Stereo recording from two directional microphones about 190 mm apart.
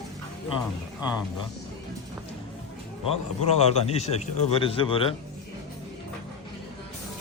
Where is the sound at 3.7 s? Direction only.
35° left (ahead or behind).